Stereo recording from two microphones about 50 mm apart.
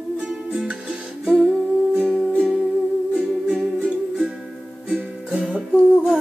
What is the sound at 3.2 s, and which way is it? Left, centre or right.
Music, centre.